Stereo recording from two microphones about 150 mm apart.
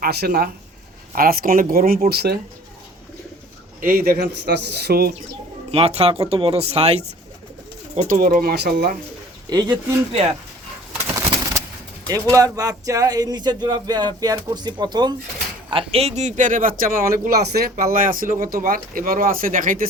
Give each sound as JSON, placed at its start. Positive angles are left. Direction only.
{"t": 0.0, "sound": "speech", "side_deg": -90}
{"t": 1.1, "sound": "speech", "side_deg": -75}
{"t": 3.8, "sound": "speech", "side_deg": -75}
{"t": 5.7, "sound": "speech", "side_deg": -40}
{"t": 8.0, "sound": "speech", "side_deg": -65}
{"t": 9.5, "sound": "speech", "side_deg": -25}
{"t": 11.1, "sound": "bird", "side_deg": -20}
{"t": 12.0, "sound": "speech", "side_deg": -25}
{"t": 15.7, "sound": "speech", "side_deg": -40}